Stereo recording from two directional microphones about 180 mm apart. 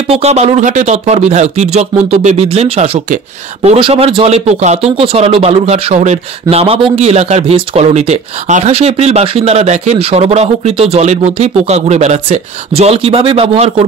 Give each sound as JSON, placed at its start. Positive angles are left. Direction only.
{"t": 0.1, "sound": "speech", "side_deg": -35}